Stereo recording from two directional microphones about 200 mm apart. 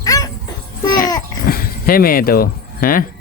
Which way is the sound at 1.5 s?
50° left (ahead or behind).